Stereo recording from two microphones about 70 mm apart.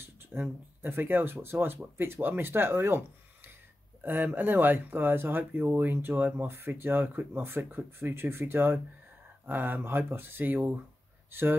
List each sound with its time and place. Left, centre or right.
0.0 s speech: right
4.0 s speech: right